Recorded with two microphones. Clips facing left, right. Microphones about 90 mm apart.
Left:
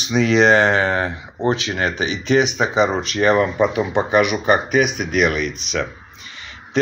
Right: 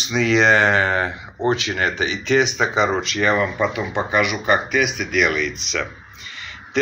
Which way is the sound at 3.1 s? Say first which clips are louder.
Left 3 dB; 40° left (ahead or behind).